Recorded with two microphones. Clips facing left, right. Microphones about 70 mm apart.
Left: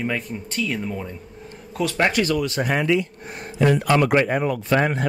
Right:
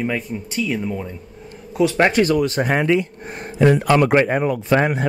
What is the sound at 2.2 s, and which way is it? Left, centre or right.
Speech, right.